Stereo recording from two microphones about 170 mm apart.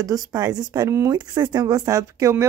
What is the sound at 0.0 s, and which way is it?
Speech, 20° right (ahead or behind).